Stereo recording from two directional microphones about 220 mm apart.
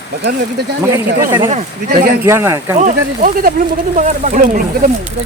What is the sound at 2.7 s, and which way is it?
Speech, 35° right (ahead or behind).